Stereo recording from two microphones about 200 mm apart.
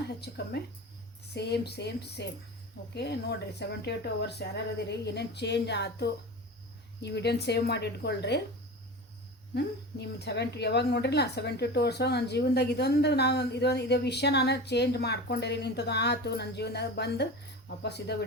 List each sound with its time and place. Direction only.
0.2 s speech: 55° left (ahead or behind)
9.6 s speech: 55° left (ahead or behind)